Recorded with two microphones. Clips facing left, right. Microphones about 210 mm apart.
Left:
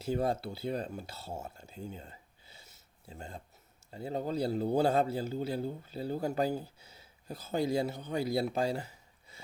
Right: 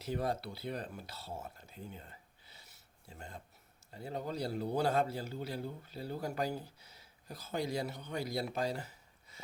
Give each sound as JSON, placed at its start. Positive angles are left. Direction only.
{"t": 0.0, "sound": "speech", "side_deg": 30}
{"t": 2.6, "sound": "a sound", "side_deg": 25}
{"t": 3.9, "sound": "speech", "side_deg": 25}